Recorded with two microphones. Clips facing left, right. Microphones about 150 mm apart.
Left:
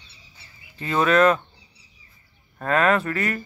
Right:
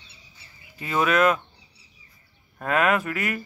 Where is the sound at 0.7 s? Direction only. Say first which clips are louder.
Left 3 dB; 5° right (ahead or behind).